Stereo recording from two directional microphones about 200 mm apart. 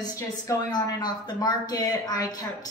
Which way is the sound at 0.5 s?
20° left (ahead or behind).